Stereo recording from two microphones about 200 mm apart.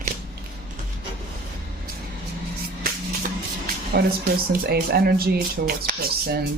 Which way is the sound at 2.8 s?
45° right (ahead or behind).